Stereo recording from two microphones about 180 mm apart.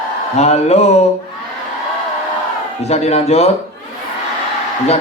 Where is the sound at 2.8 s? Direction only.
35° left (ahead or behind).